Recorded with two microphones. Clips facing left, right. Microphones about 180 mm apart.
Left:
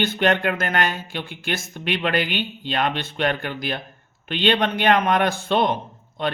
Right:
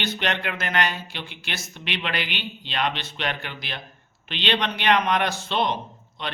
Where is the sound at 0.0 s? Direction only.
50° left (ahead or behind).